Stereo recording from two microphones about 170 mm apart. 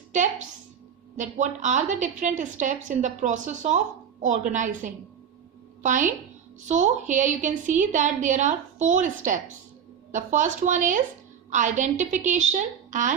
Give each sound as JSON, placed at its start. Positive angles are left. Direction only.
{"t": 1.1, "sound": "a woman's voice", "side_deg": -45}